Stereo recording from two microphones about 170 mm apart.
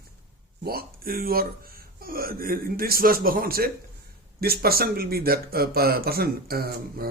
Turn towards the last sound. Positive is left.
turn(degrees=-60)  # may be behind; listen again after turning